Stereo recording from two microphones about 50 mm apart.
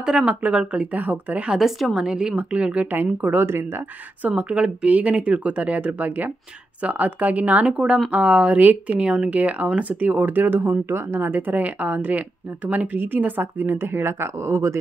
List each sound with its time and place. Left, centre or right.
0.0 s speech: right
1.5 s a woman's voice: centre
2.3 s speech: right
3.2 s speech: right
3.4 s speech: right
4.2 s speech: right
12.9 s speech: right